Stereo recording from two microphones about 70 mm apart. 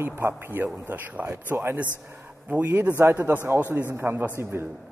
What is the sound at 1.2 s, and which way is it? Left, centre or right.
Speech, right.